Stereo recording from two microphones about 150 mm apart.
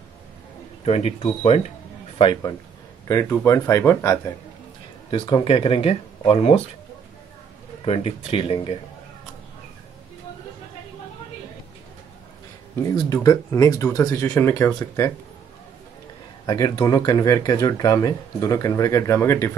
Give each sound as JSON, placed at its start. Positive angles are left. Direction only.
{"t": 0.8, "sound": "speech", "side_deg": 45}
{"t": 3.1, "sound": "speech", "side_deg": 20}
{"t": 5.1, "sound": "speech", "side_deg": 40}
{"t": 7.8, "sound": "speech", "side_deg": 40}
{"t": 12.9, "sound": "speech", "side_deg": 25}
{"t": 16.4, "sound": "speech", "side_deg": 30}